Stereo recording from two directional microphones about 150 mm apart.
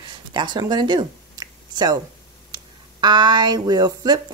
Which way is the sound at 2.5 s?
30° right (ahead or behind).